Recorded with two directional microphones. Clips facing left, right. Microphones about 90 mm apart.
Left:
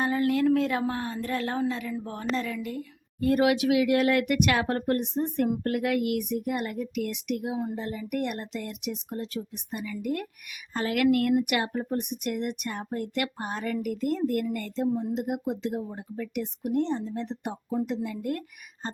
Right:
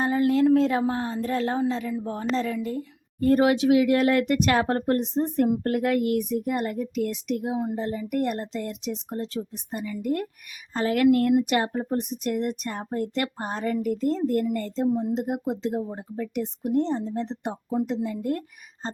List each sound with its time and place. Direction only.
0.0 s a woman's voice: 25° right (ahead or behind)